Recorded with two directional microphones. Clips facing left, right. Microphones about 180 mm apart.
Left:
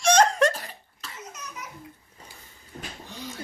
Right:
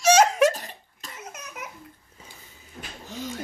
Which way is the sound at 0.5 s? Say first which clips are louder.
Right 1 dB; 45° right (ahead or behind).